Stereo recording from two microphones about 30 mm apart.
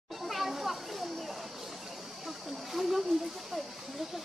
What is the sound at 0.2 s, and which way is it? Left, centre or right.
Children playing, centre.